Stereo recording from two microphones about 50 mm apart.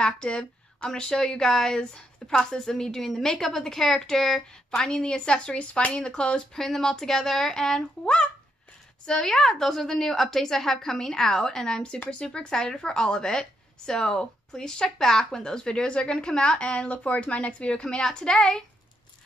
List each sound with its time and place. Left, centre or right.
0.0 s a woman's voice: centre
4.7 s a woman's voice: centre